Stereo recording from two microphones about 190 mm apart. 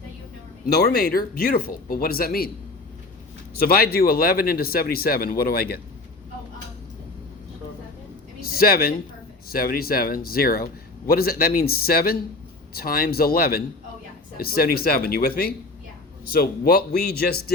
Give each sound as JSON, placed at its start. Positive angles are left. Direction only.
{"t": 0.6, "sound": "speech", "side_deg": 55}
{"t": 3.6, "sound": "speech", "side_deg": 50}
{"t": 8.5, "sound": "a man's voice", "side_deg": 50}